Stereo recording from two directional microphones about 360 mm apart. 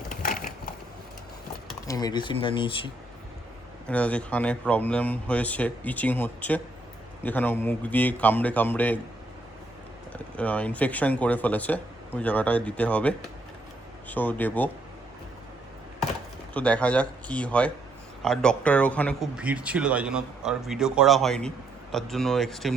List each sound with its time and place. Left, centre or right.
0.1 s crushing: left
1.9 s speech: centre
3.8 s a man's voice: centre
10.1 s a man's voice: centre
16.6 s a man's voice: centre